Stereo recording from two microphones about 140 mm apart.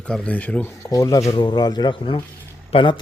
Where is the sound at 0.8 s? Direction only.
25° left (ahead or behind).